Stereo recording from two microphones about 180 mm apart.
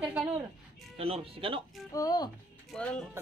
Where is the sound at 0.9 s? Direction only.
30° right (ahead or behind).